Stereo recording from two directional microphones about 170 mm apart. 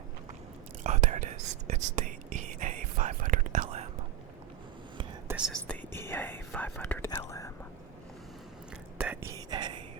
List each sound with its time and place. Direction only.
0.9 s whispering: 45° right (ahead or behind)
5.6 s whispering: 10° left (ahead or behind)
9.0 s whispering: 10° right (ahead or behind)
9.3 s whispering: 25° right (ahead or behind)